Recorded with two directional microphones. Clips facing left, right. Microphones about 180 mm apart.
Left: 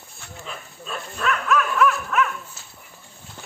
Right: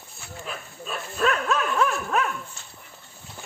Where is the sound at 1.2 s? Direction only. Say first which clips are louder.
Left 1 dB; 30° right (ahead or behind).